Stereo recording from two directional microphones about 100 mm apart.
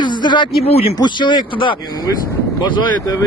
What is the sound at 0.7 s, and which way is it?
Speech, 80° left.